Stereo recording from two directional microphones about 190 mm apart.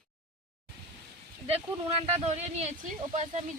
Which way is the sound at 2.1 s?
35° right (ahead or behind).